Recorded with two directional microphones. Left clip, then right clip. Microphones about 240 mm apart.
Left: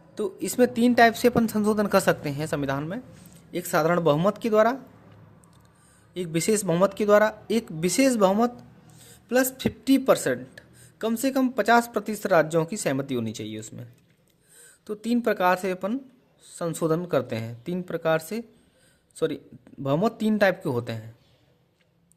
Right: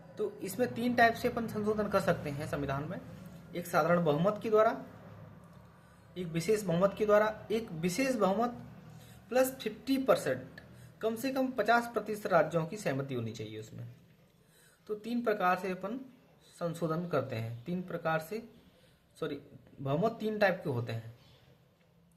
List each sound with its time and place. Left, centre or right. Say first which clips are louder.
0.1 s a woman's voice: left 7 dB; left
6.1 s a woman's voice: left 7 dB; left
14.8 s a woman's voice: left 8 dB; left
19.8 s a woman's voice: left 7 dB; left